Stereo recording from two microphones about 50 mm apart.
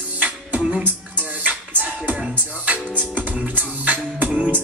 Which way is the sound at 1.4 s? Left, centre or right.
Right.